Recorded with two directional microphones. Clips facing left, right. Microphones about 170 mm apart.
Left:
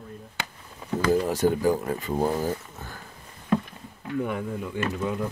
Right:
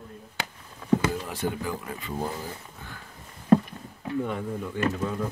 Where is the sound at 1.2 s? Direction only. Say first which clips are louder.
Left 9 dB; 40° left (ahead or behind).